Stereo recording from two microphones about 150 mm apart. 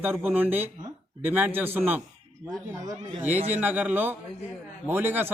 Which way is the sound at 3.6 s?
10° right (ahead or behind).